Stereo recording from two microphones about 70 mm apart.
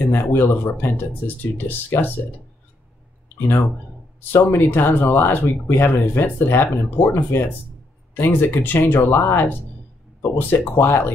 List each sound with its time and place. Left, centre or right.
0.1 s speech: left
3.3 s speech: left
10.7 s speech: left